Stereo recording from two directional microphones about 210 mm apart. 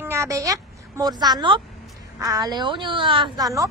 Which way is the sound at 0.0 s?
15° right (ahead or behind).